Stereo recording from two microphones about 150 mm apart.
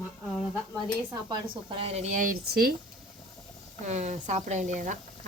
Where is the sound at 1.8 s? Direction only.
45° right (ahead or behind); by 2.7 s 75° right (ahead or behind).